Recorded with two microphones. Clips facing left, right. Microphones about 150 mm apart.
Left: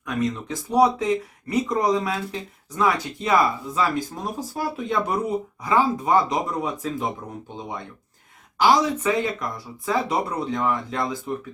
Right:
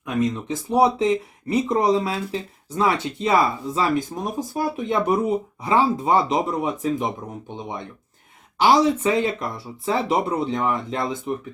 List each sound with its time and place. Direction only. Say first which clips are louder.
0.0 s speech: right 2 dB; 20° right (ahead or behind)
8.6 s speech: right 2 dB; 30° right (ahead or behind)